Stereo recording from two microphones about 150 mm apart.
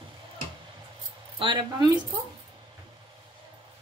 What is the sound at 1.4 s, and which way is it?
Speech, 30° right (ahead or behind).